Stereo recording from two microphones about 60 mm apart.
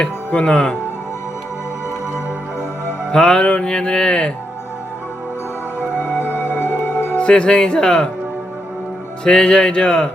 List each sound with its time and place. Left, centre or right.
0.3 s speech: centre
3.1 s speech: centre
5.9 s music: left
7.2 s speech: centre
9.2 s speech: centre